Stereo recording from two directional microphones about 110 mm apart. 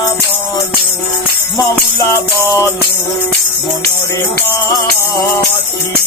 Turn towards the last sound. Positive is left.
turn(degrees=25)  # may be behind; listen again after turning